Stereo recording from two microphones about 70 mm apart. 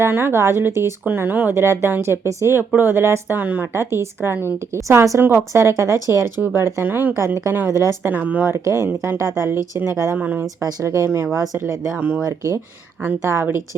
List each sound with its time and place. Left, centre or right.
0.0 s speech: right
1.6 s speech: right
3.8 s speech: right
4.9 s speech: right
5.2 s speech: right
8.1 s speech: right
8.4 s speech: right
10.2 s speech: right
10.8 s speech: right
11.9 s speech: right